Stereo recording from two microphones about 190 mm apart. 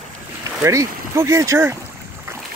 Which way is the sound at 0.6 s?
15° right (ahead or behind).